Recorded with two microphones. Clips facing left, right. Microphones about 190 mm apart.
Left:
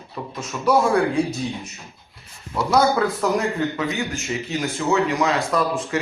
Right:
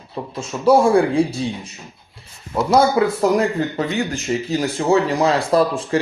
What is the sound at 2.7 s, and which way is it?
A man's voice, 30° right (ahead or behind).